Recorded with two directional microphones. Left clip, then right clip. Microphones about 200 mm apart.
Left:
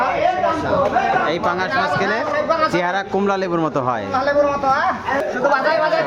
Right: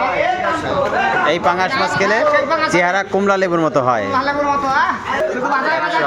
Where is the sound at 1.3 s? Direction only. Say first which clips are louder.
Right 4 dB; 5° right (ahead or behind).